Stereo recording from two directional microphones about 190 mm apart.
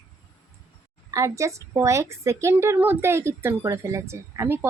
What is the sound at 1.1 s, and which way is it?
A woman's voice, 15° right (ahead or behind).